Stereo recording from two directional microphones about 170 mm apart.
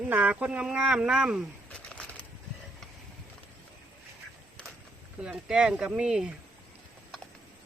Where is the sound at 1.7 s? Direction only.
5° left (ahead or behind).